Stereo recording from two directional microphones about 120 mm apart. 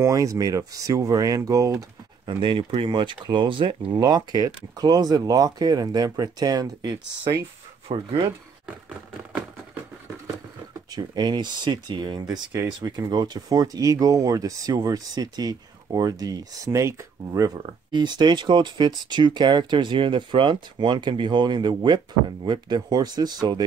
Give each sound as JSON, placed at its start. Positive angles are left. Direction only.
{"t": 0.0, "sound": "speech", "side_deg": -30}
{"t": 2.2, "sound": "speech", "side_deg": -45}
{"t": 7.9, "sound": "speech", "side_deg": -45}
{"t": 10.9, "sound": "speech", "side_deg": -35}